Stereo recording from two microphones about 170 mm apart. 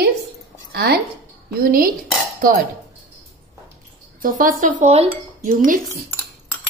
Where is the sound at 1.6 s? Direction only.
60° right (ahead or behind).